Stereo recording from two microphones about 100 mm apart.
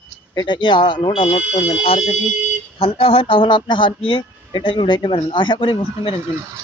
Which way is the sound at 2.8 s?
65° left (ahead or behind).